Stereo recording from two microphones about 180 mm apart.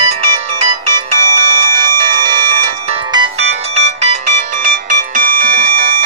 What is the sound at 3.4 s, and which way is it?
Ringtone, 35° right (ahead or behind).